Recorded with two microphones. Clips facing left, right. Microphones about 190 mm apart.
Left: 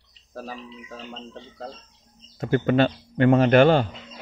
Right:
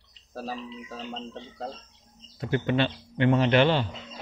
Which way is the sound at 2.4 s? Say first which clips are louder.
Left 5 dB; 45° left (ahead or behind).